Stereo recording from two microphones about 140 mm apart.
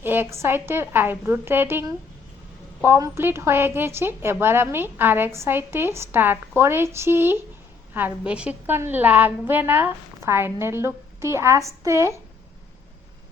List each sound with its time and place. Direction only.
0.0 s a woman's voice: 15° right (ahead or behind)
2.8 s a woman's voice: 15° right (ahead or behind)